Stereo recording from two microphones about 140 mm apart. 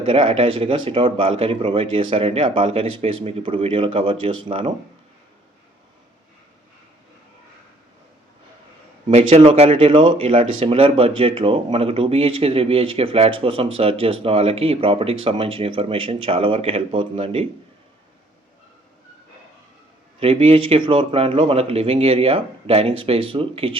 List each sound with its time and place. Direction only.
0.0 s speech: 40° right (ahead or behind)
9.0 s speech: 50° right (ahead or behind)
20.1 s speech: 40° right (ahead or behind)